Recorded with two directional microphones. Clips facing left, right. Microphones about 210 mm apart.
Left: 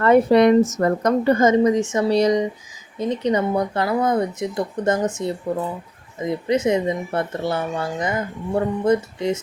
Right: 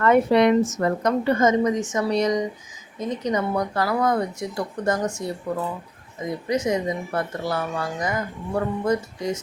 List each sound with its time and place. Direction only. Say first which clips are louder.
0.0 s a woman's voice: left 3 dB; 40° left (ahead or behind); by 5.3 s 20° left (ahead or behind)
6.7 s speech: left 4 dB; 25° left (ahead or behind)